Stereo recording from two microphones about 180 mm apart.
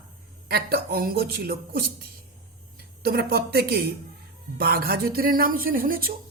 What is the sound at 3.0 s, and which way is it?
A man's voice, 60° right (ahead or behind).